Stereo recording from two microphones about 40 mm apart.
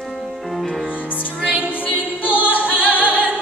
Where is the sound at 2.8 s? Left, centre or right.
Left.